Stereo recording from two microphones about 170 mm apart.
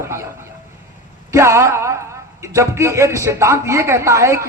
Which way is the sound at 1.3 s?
15° right (ahead or behind).